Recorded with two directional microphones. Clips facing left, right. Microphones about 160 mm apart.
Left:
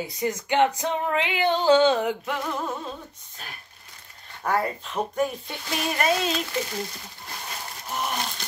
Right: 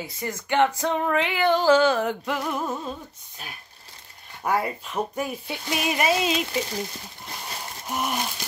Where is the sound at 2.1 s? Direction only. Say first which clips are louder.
Right 1 dB; 5° left (ahead or behind).